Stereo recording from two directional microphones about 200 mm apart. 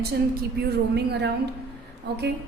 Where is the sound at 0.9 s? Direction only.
55° right (ahead or behind).